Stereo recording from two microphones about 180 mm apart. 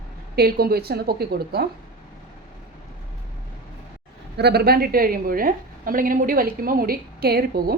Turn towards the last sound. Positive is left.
turn(degrees=-60)  # may be behind; listen again after turning